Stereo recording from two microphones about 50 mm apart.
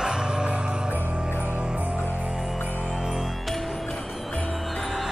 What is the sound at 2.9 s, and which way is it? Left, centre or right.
Music, centre.